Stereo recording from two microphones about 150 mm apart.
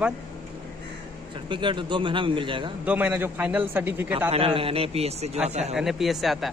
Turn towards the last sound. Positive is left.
turn(degrees=0)  # may be behind; listen again after turning